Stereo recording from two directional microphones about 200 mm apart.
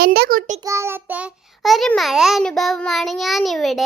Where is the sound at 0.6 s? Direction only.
15° right (ahead or behind).